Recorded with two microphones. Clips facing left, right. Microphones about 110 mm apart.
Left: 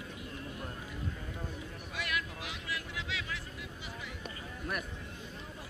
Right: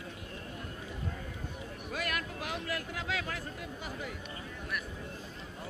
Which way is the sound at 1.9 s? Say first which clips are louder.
Right 1 dB; 45° right (ahead or behind).